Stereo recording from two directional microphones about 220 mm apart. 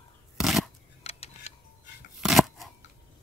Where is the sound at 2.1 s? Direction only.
Centre (ahead or behind).